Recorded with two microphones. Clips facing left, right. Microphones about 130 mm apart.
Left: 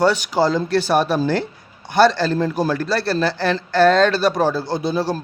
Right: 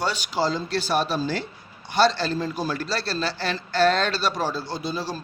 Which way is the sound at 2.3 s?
55° left (ahead or behind).